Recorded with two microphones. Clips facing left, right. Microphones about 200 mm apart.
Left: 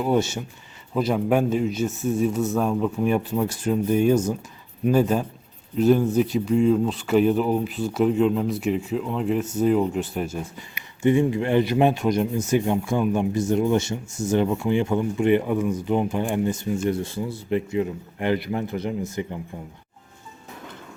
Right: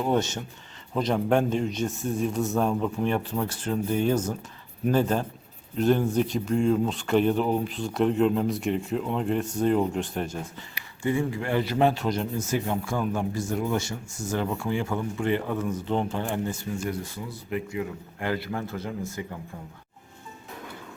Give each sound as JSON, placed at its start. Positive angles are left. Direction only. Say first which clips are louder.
{"t": 0.0, "sound": "a man's voice", "louder": "left 3 dB", "side_deg": 10}
{"t": 11.0, "sound": "speech", "louder": "left 7 dB", "side_deg": 20}